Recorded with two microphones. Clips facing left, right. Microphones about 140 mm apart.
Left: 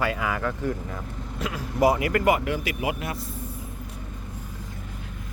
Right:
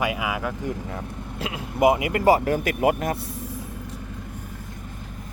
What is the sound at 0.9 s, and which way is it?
Speech, 30° right (ahead or behind).